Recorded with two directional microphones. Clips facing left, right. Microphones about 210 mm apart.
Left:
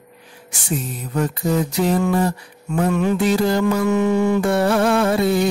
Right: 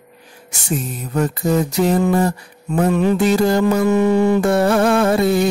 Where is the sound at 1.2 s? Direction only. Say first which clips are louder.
Right 2 dB; 45° right (ahead or behind).